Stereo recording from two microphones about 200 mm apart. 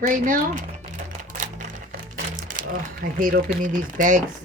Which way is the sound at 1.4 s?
40° right (ahead or behind).